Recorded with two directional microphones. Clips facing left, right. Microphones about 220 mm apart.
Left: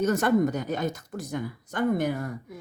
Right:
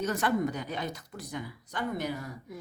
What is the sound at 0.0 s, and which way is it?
Speech, 45° left (ahead or behind).